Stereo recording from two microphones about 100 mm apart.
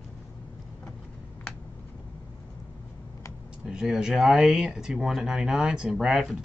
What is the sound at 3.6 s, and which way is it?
Speech, 5° right (ahead or behind).